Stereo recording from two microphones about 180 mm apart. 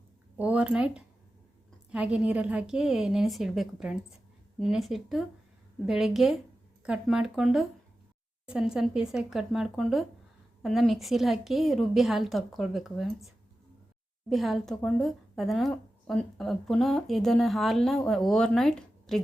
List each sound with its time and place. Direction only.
0.3 s a woman's voice: 5° right (ahead or behind)